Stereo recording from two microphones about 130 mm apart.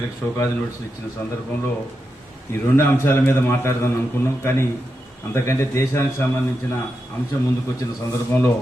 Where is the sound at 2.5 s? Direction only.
20° left (ahead or behind).